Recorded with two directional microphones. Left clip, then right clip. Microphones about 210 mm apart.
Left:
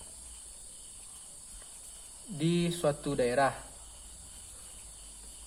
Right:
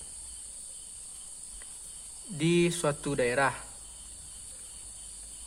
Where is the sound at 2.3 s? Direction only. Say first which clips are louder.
Right 5 dB; 40° right (ahead or behind).